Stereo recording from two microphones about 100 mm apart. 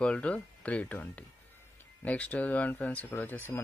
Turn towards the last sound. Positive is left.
turn(degrees=20)  # may be behind; listen again after turning